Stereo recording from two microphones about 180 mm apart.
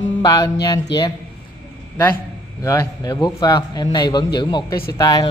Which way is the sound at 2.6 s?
20° left (ahead or behind).